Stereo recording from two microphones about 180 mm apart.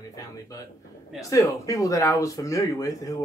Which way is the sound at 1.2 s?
20° left (ahead or behind).